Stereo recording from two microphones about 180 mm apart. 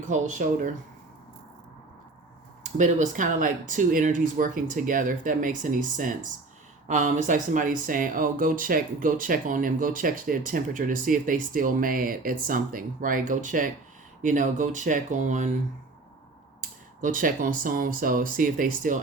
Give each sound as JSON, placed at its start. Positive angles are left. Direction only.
{"t": 0.1, "sound": "speech", "side_deg": -45}
{"t": 2.7, "sound": "speech", "side_deg": -45}
{"t": 17.0, "sound": "speech", "side_deg": -50}